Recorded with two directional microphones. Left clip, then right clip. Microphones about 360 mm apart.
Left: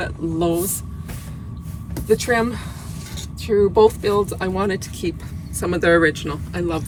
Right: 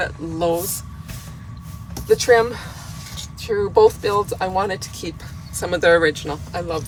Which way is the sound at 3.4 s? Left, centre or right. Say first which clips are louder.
Even; centre.